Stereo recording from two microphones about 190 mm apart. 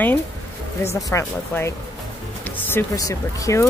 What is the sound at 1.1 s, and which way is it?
Speech, 15° left (ahead or behind).